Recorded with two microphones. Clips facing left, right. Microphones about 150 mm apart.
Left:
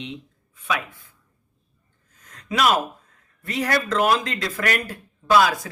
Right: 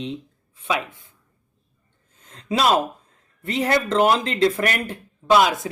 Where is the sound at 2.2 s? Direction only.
30° right (ahead or behind).